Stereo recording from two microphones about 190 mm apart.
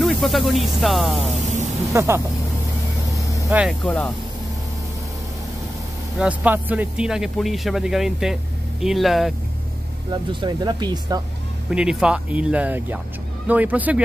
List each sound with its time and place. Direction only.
0.0 s speech: centre (ahead or behind)
1.9 s speech: 15° right (ahead or behind)
3.4 s speech: centre (ahead or behind)
6.1 s speech: 5° right (ahead or behind)
10.4 s speech: 25° right (ahead or behind)
11.7 s speech: 5° right (ahead or behind)